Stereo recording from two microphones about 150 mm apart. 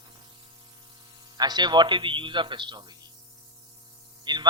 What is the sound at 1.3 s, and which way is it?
Speech, 30° right (ahead or behind).